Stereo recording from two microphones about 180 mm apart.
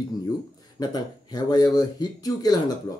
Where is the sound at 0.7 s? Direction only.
20° left (ahead or behind).